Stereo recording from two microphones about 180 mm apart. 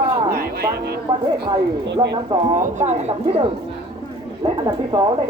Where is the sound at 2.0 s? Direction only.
20° right (ahead or behind).